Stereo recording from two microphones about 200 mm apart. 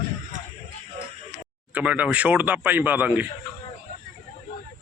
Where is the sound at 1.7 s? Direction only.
5° right (ahead or behind).